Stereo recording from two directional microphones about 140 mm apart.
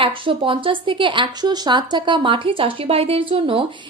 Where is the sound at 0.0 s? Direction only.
40° right (ahead or behind).